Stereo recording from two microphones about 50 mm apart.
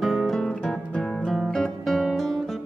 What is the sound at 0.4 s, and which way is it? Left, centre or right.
Guitar, centre.